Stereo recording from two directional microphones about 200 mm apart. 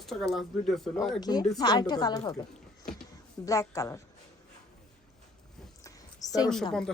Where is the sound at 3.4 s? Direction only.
15° left (ahead or behind).